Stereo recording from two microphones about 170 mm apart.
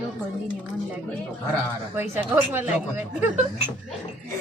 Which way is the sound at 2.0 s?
10° right (ahead or behind).